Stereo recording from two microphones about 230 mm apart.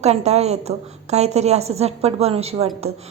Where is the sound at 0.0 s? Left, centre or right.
Right.